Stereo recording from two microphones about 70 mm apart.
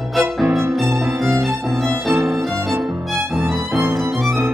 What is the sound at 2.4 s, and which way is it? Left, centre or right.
Violin, centre.